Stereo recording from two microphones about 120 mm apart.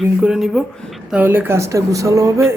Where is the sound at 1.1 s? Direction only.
15° right (ahead or behind).